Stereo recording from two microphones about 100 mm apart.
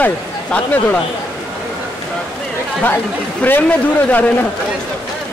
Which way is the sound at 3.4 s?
15° left (ahead or behind).